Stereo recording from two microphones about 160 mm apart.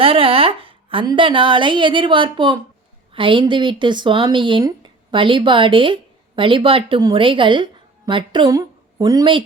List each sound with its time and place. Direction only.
0.0 s speech: 35° right (ahead or behind)